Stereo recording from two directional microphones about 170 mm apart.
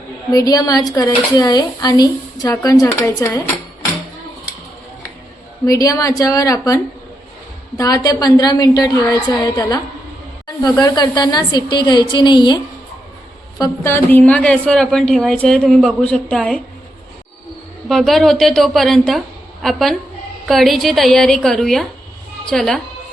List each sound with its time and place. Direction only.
0.3 s speech: 20° left (ahead or behind)
5.6 s speech: 20° left (ahead or behind)
13.6 s a woman's voice: 15° left (ahead or behind)
17.8 s a woman's voice: centre (ahead or behind)